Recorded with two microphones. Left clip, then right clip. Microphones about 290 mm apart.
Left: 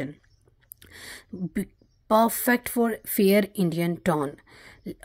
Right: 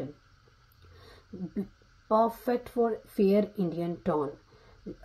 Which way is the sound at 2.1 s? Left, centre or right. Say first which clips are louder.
Left 5 dB; left.